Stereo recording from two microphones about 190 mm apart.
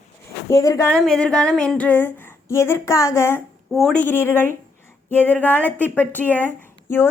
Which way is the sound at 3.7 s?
Centre (ahead or behind).